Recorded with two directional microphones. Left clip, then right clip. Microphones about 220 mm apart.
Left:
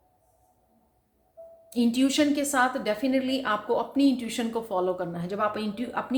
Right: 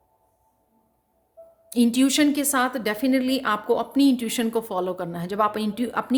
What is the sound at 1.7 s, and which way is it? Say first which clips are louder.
A woman's voice: right 4 dB; 45° right (ahead or behind).